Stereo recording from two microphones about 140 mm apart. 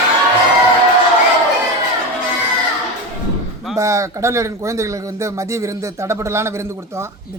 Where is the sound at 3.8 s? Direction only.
20° right (ahead or behind).